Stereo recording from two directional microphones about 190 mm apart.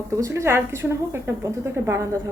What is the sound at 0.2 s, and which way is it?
A woman's voice, 15° right (ahead or behind).